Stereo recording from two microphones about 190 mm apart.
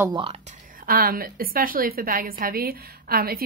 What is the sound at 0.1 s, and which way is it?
Speech, 25° right (ahead or behind).